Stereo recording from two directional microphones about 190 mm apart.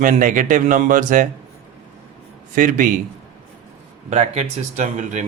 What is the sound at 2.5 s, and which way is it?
Speech, 45° right (ahead or behind).